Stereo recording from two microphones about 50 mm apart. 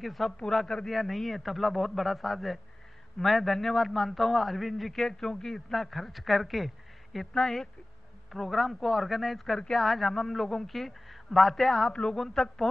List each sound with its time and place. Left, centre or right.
0.0 s a man's voice: centre
7.3 s speech: centre
8.3 s a man's voice: centre
11.9 s speech: centre
12.2 s speech: centre